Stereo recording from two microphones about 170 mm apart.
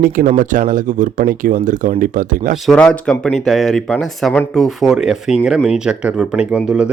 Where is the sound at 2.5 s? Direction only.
Centre (ahead or behind).